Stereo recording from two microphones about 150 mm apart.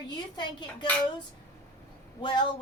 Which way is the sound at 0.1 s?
30° left (ahead or behind).